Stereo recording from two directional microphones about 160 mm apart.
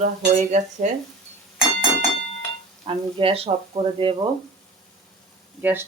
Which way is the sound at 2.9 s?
35° right (ahead or behind).